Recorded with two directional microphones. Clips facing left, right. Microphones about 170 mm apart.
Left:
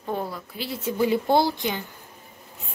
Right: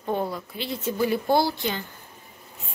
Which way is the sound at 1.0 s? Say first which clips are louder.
Left 2 dB; 20° left (ahead or behind).